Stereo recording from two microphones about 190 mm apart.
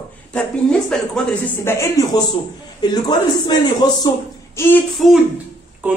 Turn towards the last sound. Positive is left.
turn(degrees=-10)  # may be behind; listen again after turning